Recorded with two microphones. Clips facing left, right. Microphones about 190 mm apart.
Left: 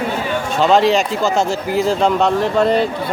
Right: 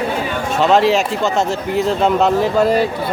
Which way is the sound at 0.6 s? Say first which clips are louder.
Even; centre (ahead or behind).